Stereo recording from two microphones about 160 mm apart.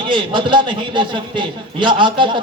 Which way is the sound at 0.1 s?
30° right (ahead or behind).